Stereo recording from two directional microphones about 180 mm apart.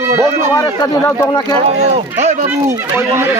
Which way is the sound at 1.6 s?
40° right (ahead or behind).